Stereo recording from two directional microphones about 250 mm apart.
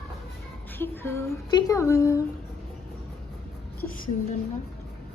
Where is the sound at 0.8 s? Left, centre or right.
Centre.